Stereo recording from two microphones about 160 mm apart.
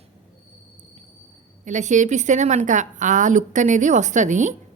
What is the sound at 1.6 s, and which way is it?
A woman's voice, 50° right (ahead or behind).